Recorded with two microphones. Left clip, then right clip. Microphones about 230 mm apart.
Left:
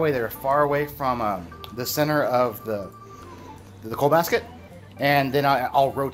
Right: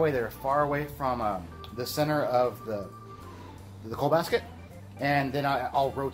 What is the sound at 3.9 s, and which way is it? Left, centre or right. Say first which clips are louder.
Speech: left 6 dB; left.